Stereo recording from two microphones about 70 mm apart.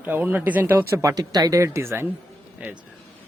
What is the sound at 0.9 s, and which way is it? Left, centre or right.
Speech, right.